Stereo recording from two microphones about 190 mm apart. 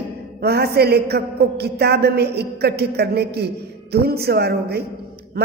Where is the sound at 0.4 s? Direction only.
55° right (ahead or behind).